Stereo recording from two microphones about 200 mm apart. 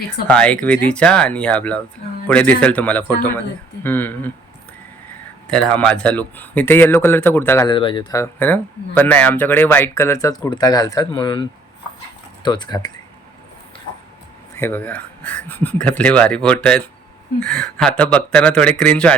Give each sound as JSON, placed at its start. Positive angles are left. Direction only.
{"t": 0.3, "sound": "speech", "side_deg": 5}
{"t": 5.5, "sound": "speech", "side_deg": 5}
{"t": 7.7, "sound": "speech", "side_deg": 25}
{"t": 14.5, "sound": "speech", "side_deg": 10}